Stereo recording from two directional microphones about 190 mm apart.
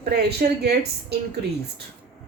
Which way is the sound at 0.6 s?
60° right (ahead or behind).